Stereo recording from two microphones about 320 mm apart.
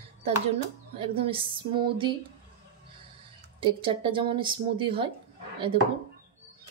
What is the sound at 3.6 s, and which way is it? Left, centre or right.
A woman's voice, centre.